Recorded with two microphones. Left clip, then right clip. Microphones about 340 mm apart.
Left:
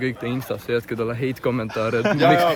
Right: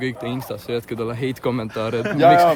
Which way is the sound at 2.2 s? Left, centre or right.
Right.